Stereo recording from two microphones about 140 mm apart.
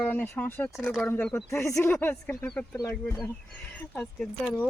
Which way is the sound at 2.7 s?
25° left (ahead or behind).